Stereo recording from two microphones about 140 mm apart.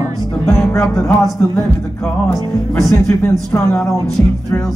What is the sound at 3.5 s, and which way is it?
Music, 15° left (ahead or behind).